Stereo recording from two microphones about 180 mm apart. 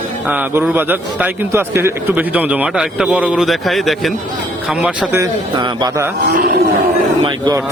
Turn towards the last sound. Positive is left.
turn(degrees=-20)  # may be behind; listen again after turning